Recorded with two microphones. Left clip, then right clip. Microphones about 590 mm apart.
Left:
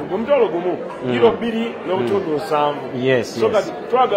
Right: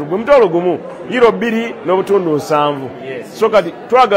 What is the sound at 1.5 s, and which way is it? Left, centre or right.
A man's voice, right.